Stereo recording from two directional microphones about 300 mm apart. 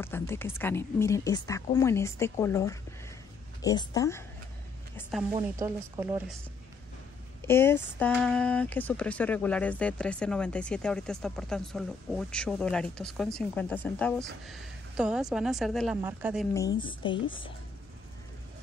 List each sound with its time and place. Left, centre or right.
0.0 s speech: centre
5.3 s speech: centre
7.4 s speech: centre
16.5 s speech: centre